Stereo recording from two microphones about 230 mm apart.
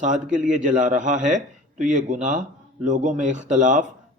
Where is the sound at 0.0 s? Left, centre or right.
Right.